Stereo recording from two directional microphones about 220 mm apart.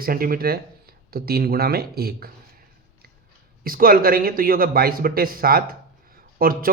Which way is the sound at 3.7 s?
40° right (ahead or behind).